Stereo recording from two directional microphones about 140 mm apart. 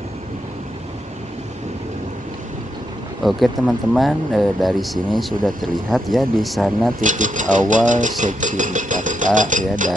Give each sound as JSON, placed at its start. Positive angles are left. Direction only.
{"t": 3.3, "sound": "speech", "side_deg": 0}
{"t": 7.0, "sound": "speech", "side_deg": -65}